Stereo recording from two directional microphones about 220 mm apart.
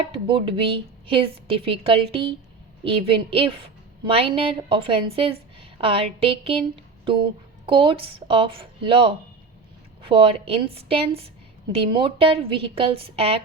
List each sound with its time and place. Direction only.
0.1 s a woman's voice: 25° right (ahead or behind)